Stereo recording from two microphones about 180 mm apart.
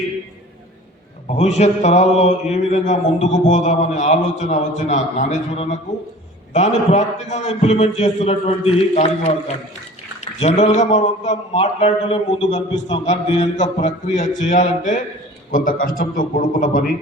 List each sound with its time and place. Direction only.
1.3 s speech: 35° left (ahead or behind)
10.4 s a man's voice: 40° left (ahead or behind)